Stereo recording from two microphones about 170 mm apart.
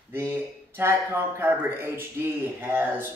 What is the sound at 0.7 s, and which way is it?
Speech, 15° right (ahead or behind).